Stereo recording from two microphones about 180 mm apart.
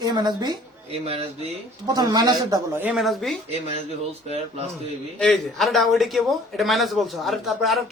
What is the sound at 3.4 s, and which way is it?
Speech, 35° right (ahead or behind).